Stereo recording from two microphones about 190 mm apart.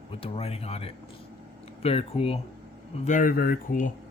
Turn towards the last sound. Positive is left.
turn(degrees=45)  # may be behind; listen again after turning